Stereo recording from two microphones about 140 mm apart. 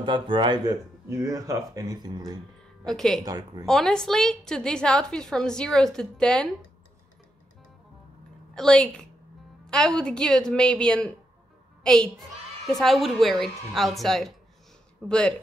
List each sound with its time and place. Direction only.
0.0 s speech: 35° right (ahead or behind)
1.0 s speech: 20° right (ahead or behind)
2.9 s a woman's voice: centre (ahead or behind)
3.3 s speech: 30° right (ahead or behind)
3.6 s a woman's voice: 5° left (ahead or behind)
8.5 s a woman's voice: 5° left (ahead or behind)